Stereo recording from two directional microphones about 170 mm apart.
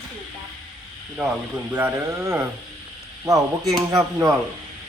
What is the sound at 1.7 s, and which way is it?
Speech, 15° right (ahead or behind).